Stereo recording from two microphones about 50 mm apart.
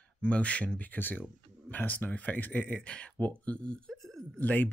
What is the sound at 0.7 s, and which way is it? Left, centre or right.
Speech, left.